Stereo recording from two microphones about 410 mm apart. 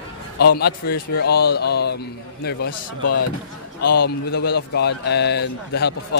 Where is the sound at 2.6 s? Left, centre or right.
Left.